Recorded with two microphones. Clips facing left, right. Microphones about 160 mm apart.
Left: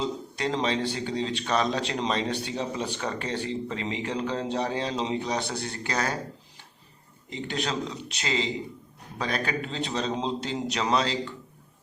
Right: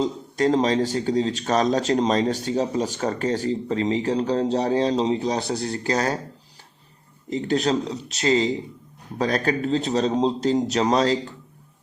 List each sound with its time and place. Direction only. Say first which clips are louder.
0.0 s a man's voice: right 8 dB; 45° right (ahead or behind)
7.3 s a man's voice: right 9 dB; 40° right (ahead or behind)